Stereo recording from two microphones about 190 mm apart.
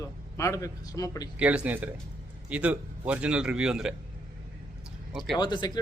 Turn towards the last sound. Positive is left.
turn(degrees=25)  # may be behind; listen again after turning